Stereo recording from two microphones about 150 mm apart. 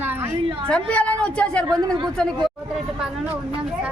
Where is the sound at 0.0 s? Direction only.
15° right (ahead or behind).